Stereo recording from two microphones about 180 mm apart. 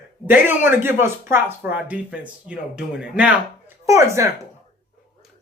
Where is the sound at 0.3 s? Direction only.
10° right (ahead or behind).